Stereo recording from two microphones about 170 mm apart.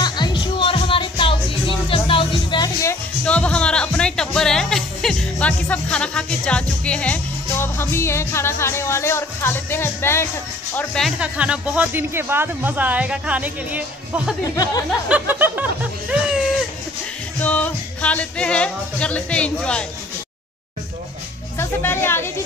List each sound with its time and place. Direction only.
0.0 s music: 25° left (ahead or behind)
3.3 s music: 5° left (ahead or behind)
10.8 s speech: centre (ahead or behind)
14.4 s speech: 20° left (ahead or behind)
14.9 s speech: 5° right (ahead or behind)
17.4 s speech: 10° left (ahead or behind)
21.5 s speech: 15° left (ahead or behind)